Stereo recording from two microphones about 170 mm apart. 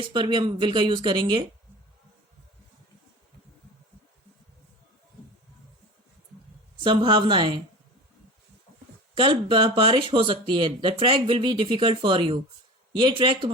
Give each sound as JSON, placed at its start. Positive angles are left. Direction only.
{"t": 0.0, "sound": "speech", "side_deg": -30}
{"t": 6.8, "sound": "speech", "side_deg": -30}
{"t": 9.1, "sound": "speech", "side_deg": -30}